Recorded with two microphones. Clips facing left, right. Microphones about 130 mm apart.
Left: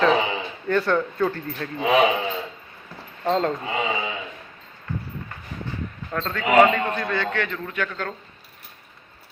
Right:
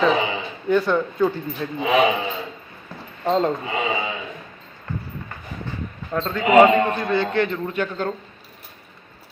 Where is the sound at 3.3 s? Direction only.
20° right (ahead or behind).